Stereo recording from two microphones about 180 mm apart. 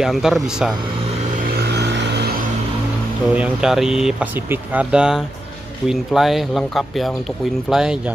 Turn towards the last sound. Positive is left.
turn(degrees=-5)  # may be behind; listen again after turning